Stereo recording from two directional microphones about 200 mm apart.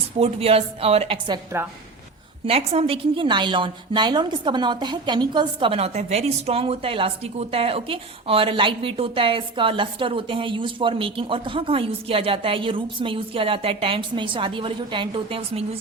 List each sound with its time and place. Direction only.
0.2 s a woman's voice: 30° right (ahead or behind)
2.5 s a woman's voice: 30° right (ahead or behind)